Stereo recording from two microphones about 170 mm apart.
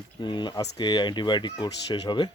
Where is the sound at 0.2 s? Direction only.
25° left (ahead or behind).